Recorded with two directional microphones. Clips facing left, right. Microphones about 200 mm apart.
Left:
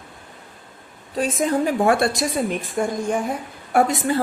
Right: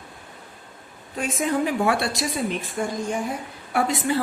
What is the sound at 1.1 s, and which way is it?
A woman's voice, 35° left (ahead or behind).